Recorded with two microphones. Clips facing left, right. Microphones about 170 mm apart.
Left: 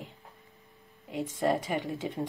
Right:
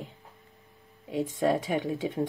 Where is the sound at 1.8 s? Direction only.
20° right (ahead or behind).